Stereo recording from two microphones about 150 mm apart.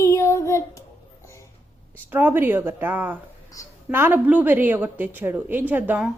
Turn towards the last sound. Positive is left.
turn(degrees=-10)  # may be behind; listen again after turning